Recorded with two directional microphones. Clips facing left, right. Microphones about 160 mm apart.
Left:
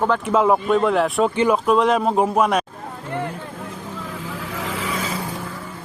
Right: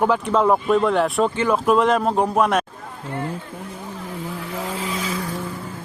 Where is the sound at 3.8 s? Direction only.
90° left.